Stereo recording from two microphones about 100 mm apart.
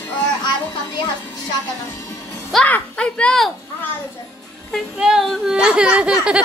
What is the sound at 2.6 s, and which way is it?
Speech, 15° left (ahead or behind).